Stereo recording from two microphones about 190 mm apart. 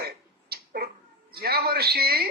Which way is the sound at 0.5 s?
55° right (ahead or behind).